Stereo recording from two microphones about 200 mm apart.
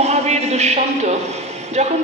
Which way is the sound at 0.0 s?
35° right (ahead or behind).